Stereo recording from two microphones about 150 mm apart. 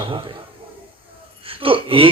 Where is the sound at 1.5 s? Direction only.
35° right (ahead or behind).